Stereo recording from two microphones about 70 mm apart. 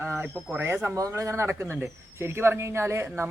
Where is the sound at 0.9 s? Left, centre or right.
Right.